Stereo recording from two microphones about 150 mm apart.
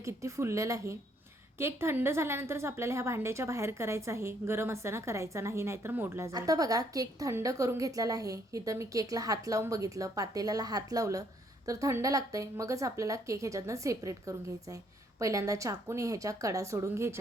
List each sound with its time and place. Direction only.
0.0 s a woman's voice: 20° right (ahead or behind)